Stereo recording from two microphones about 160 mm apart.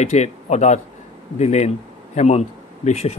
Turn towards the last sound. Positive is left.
turn(degrees=45)  # may be behind; listen again after turning